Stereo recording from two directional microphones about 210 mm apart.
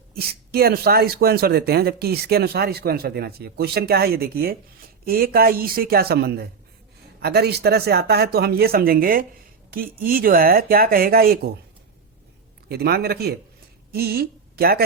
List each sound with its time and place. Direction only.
0.1 s speech: 45° right (ahead or behind)
12.6 s a woman's voice: 50° right (ahead or behind)